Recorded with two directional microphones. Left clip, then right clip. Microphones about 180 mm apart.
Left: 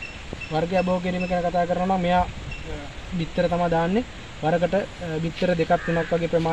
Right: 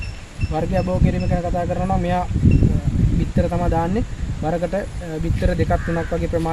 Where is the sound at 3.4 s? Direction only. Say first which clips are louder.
Even; 15° left (ahead or behind).